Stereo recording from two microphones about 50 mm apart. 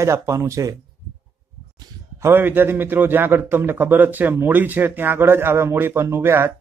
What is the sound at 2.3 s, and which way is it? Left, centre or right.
A man's voice, right.